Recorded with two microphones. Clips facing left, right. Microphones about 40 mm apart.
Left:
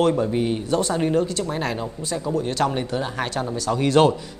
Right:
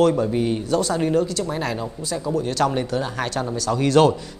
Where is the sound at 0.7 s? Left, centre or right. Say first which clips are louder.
Right 1 dB; left.